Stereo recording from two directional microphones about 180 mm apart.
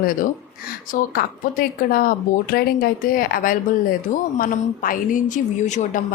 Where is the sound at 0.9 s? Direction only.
50° left (ahead or behind).